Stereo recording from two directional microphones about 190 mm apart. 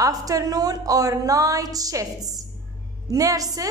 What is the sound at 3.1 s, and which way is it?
Speech, 20° right (ahead or behind).